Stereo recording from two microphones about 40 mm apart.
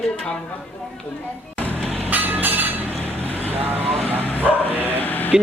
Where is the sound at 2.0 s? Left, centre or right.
Right.